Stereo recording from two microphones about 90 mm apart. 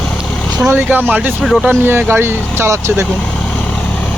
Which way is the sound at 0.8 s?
20° right (ahead or behind).